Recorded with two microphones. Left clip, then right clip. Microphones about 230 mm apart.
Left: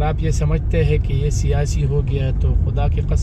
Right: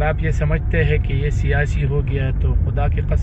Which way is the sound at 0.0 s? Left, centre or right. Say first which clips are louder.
Right 2 dB; centre.